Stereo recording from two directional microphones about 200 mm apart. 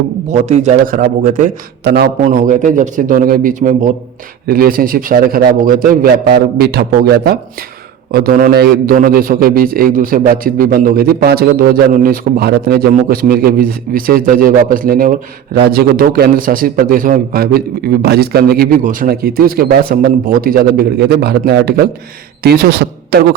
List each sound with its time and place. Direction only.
0.3 s a man's voice: 35° right (ahead or behind)
1.8 s a man's voice: 55° right (ahead or behind)
2.2 s a man's voice: 40° right (ahead or behind)